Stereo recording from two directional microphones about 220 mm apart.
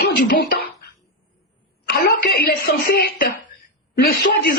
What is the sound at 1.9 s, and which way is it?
A woman's voice, 45° left (ahead or behind).